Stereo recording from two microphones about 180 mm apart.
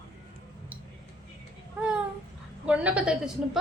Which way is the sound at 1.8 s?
5° right (ahead or behind).